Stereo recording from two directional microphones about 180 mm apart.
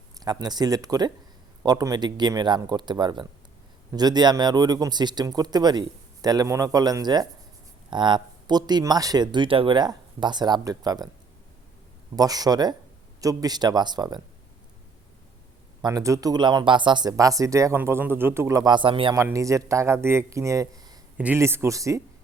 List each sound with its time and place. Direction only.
0.2 s speech: 20° right (ahead or behind)
12.1 s speech: 20° right (ahead or behind)
15.8 s speech: 20° right (ahead or behind)
19.1 s speech: 15° right (ahead or behind)